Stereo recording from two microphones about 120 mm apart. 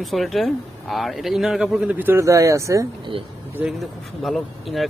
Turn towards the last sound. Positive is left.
turn(degrees=0)  # may be behind; listen again after turning